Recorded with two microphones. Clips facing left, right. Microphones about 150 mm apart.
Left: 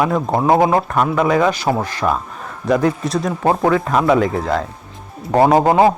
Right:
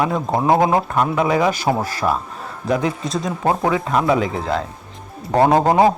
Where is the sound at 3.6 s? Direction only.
15° right (ahead or behind).